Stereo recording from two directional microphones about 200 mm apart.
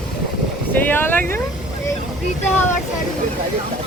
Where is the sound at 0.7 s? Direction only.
10° left (ahead or behind).